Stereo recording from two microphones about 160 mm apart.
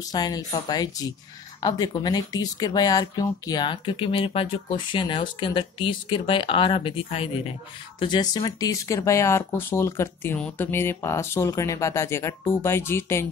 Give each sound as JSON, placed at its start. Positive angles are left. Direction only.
{"t": 0.1, "sound": "speech", "side_deg": 25}